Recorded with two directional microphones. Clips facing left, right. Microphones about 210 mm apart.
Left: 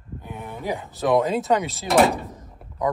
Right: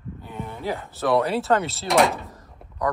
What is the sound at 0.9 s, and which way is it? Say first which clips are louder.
Speech: left 1 dB; 15° left (ahead or behind).